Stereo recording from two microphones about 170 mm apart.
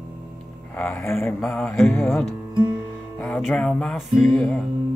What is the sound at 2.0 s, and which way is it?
Speech, centre (ahead or behind).